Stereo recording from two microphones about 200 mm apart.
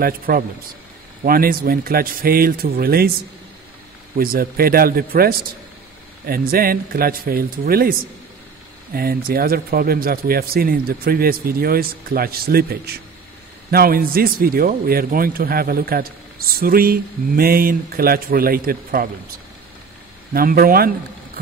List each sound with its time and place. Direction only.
0.3 s a man's voice: 50° right (ahead or behind)
4.2 s a man's voice: 45° right (ahead or behind)
8.9 s a man's voice: 50° right (ahead or behind)
20.3 s a man's voice: 45° right (ahead or behind)